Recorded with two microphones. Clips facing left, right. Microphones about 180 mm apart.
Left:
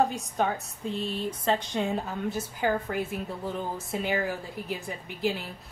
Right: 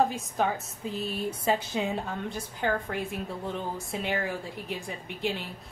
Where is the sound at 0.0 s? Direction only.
Centre (ahead or behind).